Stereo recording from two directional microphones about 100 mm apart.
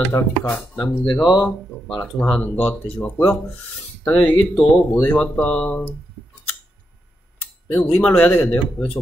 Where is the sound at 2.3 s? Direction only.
15° left (ahead or behind).